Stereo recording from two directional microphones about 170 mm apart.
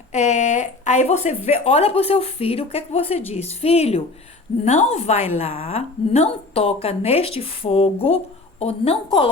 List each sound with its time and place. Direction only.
0.1 s speech: 40° left (ahead or behind)